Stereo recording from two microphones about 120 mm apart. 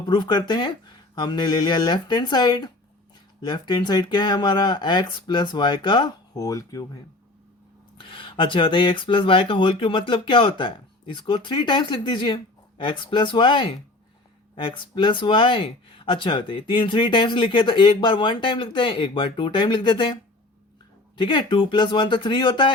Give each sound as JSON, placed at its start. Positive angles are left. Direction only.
{"t": 0.0, "sound": "speech", "side_deg": 40}
{"t": 7.9, "sound": "speech", "side_deg": 45}
{"t": 21.2, "sound": "speech", "side_deg": 40}